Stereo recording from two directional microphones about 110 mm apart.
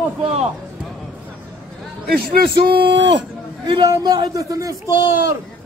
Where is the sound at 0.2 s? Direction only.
65° right (ahead or behind).